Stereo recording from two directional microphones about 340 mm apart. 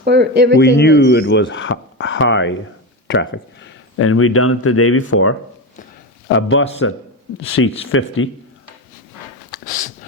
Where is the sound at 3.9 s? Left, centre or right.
Left.